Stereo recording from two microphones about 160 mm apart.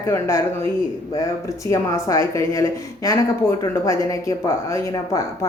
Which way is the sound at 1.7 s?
20° left (ahead or behind).